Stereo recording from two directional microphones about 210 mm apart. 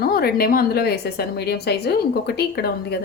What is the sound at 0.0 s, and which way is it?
A woman's voice, 45° left (ahead or behind).